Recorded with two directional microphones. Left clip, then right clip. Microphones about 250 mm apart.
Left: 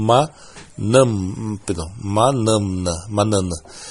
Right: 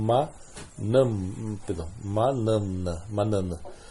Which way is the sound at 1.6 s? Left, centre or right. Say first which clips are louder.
Left 8 dB; left.